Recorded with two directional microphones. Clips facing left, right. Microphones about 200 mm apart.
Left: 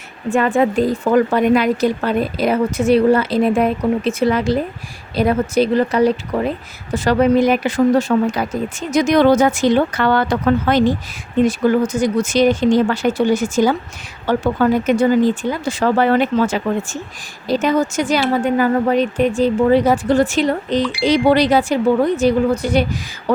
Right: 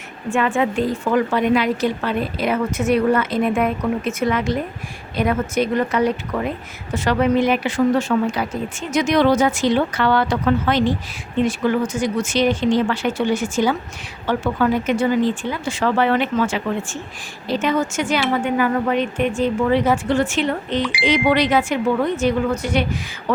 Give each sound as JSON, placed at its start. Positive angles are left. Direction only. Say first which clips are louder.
{"t": 0.3, "sound": "a woman's voice", "louder": "left 4 dB", "side_deg": 35}